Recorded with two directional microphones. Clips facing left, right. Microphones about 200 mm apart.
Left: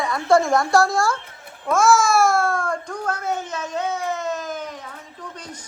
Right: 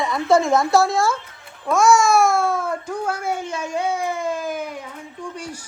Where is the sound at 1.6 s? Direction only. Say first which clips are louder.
Right 1 dB; centre (ahead or behind).